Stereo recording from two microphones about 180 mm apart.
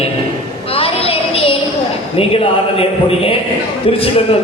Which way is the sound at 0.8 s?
30° left (ahead or behind).